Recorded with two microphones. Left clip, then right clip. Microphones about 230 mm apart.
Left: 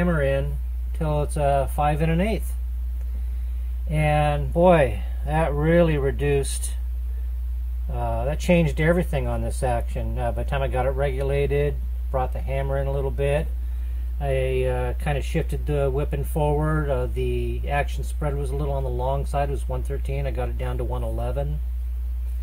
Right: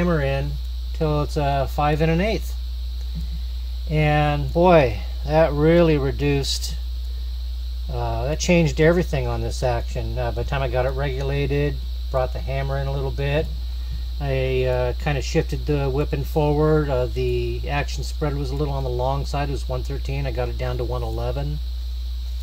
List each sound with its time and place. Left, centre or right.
0.0 s speech: right
3.9 s speech: right
7.9 s speech: right